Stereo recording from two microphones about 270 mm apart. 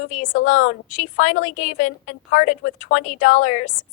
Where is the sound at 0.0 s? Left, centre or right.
Left.